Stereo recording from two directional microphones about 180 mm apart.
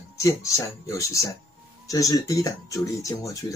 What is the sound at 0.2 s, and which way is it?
Speech, 20° left (ahead or behind).